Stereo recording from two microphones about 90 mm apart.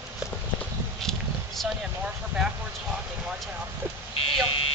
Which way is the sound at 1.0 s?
5° left (ahead or behind).